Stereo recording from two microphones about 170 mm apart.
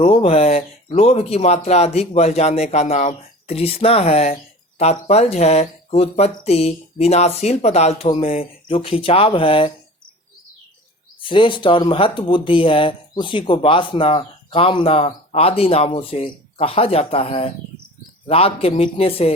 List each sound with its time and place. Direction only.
0.0 s speech: 35° left (ahead or behind)
11.2 s speech: 30° left (ahead or behind)